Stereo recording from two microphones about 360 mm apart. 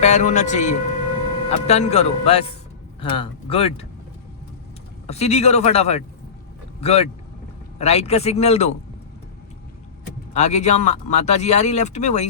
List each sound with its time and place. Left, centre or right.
0.0 s speech: centre
5.0 s speech: centre
10.3 s speech: centre